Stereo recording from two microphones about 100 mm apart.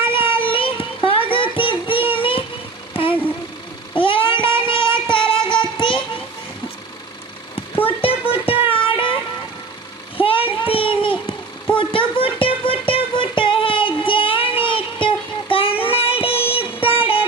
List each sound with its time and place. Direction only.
0.3 s child singing: 60° left (ahead or behind)
2.9 s a sound: 65° left (ahead or behind)
3.9 s child singing: 60° left (ahead or behind)
8.0 s music: 70° left (ahead or behind)
10.2 s child singing: 65° left (ahead or behind)
11.8 s music: 60° left (ahead or behind)
16.3 s music: 15° right (ahead or behind)
16.8 s music: 65° left (ahead or behind)